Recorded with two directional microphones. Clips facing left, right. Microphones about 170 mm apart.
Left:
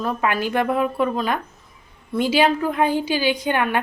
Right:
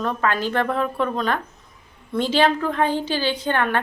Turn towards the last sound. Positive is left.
turn(degrees=10)  # may be behind; listen again after turning